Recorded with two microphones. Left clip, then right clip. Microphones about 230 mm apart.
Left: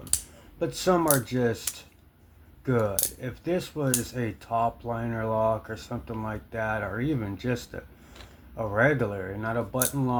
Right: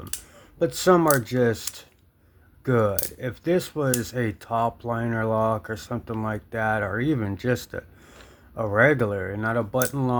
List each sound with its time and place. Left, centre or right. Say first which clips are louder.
0.6 s speech: right 5 dB; right